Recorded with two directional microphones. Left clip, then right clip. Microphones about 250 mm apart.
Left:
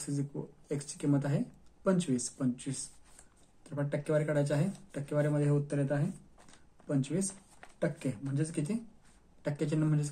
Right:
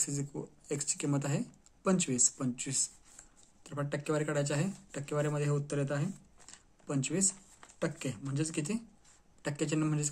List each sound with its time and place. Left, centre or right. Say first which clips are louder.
0.0 s speech: right 1 dB; right